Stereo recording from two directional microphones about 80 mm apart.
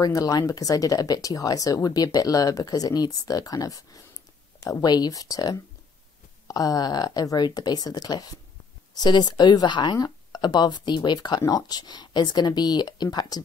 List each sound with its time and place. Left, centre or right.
0.0 s speech: left
8.9 s speech: left
9.9 s speech: left